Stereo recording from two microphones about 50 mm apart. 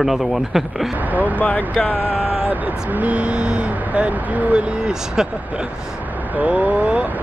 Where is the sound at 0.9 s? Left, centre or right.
Right.